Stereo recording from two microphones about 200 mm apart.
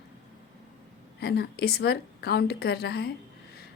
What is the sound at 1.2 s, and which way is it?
A woman's voice, 50° left (ahead or behind).